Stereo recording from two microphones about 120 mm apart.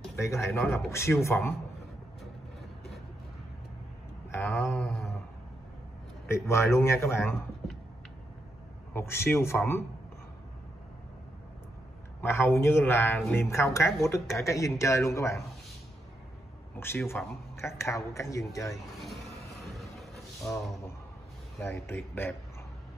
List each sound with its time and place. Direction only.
0.1 s speech: 25° left (ahead or behind)
4.3 s speech: 20° left (ahead or behind)
6.2 s speech: 25° left (ahead or behind)
8.9 s speech: 20° left (ahead or behind)
12.2 s speech: 20° left (ahead or behind)
16.7 s speech: 20° left (ahead or behind)
20.5 s speech: 20° left (ahead or behind)
21.6 s speech: 20° left (ahead or behind)